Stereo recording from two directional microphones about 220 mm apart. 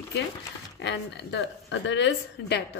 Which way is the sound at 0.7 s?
50° left (ahead or behind).